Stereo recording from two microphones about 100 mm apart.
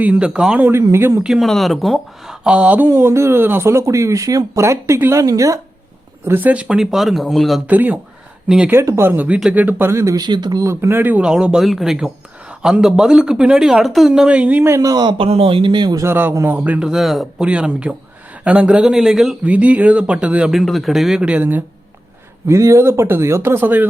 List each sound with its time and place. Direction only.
0.0 s speech: 10° right (ahead or behind)
0.7 s speech: 25° right (ahead or behind)
1.2 s speech: 5° right (ahead or behind); by 5.5 s 35° right (ahead or behind)
6.2 s speech: 20° right (ahead or behind); by 7.6 s centre (ahead or behind)
7.7 s speech: 15° right (ahead or behind)
8.7 s speech: 30° right (ahead or behind)
10.2 s speech: 45° right (ahead or behind)
10.6 s speech: 25° right (ahead or behind)
14.8 s speech: 40° right (ahead or behind)
15.2 s speech: 70° right (ahead or behind); by 16.0 s 50° right (ahead or behind)
16.0 s speech: 25° right (ahead or behind)
16.9 s speech: centre (ahead or behind)
19.5 s speech: 15° right (ahead or behind)
22.4 s speech: 30° right (ahead or behind)